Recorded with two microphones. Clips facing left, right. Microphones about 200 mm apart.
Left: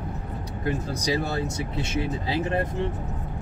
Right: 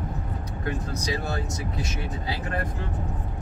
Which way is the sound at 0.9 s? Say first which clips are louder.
Left 3 dB; 30° left (ahead or behind).